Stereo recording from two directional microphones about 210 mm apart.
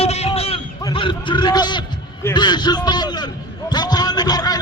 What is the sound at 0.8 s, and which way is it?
A man's voice, 20° left (ahead or behind).